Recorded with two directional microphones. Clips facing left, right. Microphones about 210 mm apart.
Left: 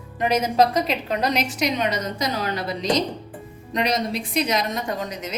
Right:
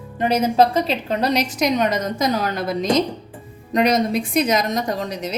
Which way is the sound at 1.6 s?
45° right (ahead or behind).